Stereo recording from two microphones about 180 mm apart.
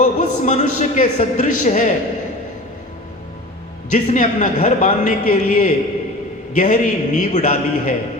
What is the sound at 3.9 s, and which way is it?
A man's voice, 45° left (ahead or behind).